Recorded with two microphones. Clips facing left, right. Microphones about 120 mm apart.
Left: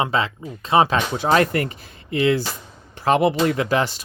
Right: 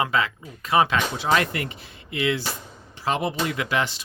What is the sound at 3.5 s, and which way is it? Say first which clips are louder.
Speech: left 5 dB; 35° left (ahead or behind).